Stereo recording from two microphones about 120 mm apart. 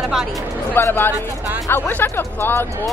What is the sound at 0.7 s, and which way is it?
Speech, 15° left (ahead or behind).